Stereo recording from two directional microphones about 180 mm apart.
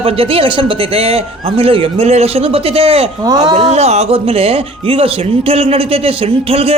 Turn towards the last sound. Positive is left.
turn(degrees=-30)  # may be behind; listen again after turning